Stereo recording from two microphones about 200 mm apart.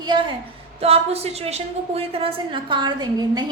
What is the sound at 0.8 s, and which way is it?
A woman's voice, 30° right (ahead or behind).